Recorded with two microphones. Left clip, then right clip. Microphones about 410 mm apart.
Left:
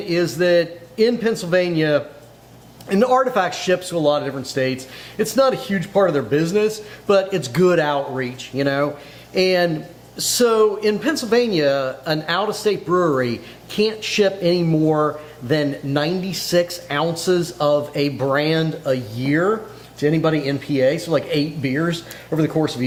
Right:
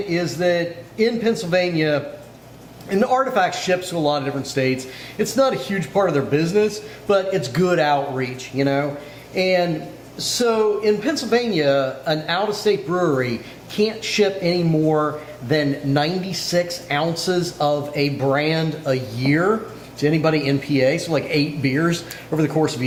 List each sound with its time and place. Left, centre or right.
0.1 s speech: left